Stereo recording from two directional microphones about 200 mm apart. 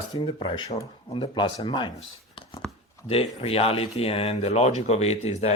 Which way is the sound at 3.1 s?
30° left (ahead or behind).